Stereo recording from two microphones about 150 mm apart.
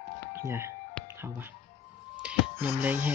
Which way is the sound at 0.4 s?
20° right (ahead or behind).